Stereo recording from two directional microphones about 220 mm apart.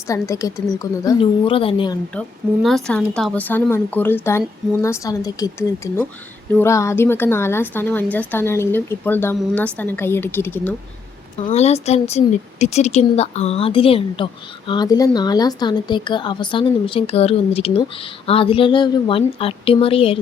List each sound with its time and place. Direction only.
0.1 s a woman's voice: 15° left (ahead or behind)
2.6 s a woman's voice: centre (ahead or behind)
11.3 s a woman's voice: 30° left (ahead or behind)